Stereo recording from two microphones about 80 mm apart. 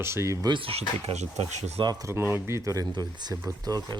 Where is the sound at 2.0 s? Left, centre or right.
Right.